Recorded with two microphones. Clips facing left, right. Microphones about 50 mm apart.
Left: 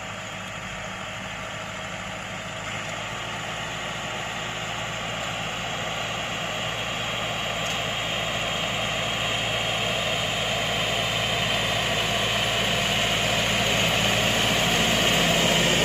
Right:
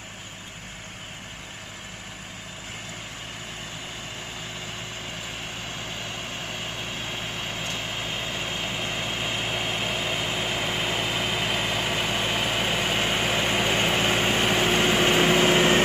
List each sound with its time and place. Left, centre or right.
7.1 s vehicle: left
7.6 s vehicle: left
7.9 s vehicle: centre
15.5 s vehicle: right